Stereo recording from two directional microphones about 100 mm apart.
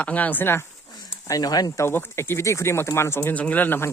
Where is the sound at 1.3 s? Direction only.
40° left (ahead or behind).